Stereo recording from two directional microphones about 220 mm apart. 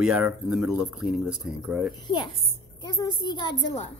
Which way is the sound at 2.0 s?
20° left (ahead or behind).